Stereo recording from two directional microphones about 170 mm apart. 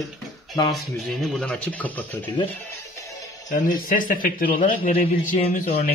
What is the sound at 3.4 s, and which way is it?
A man's voice, 50° left (ahead or behind).